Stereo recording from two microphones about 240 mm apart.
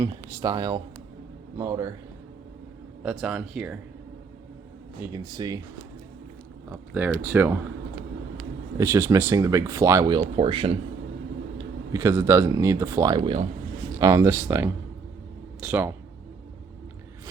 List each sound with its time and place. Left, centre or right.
0.0 s speech: centre
3.0 s speech: centre
5.1 s speech: centre
6.7 s speech: centre
8.8 s speech: centre
11.5 s speech: centre